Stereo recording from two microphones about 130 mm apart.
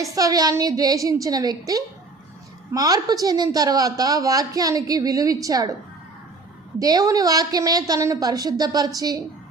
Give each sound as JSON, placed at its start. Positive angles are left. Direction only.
{"t": 0.0, "sound": "a woman's voice", "side_deg": -25}
{"t": 6.7, "sound": "a woman's voice", "side_deg": -30}